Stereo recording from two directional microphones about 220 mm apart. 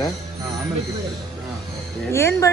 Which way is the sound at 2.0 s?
10° left (ahead or behind).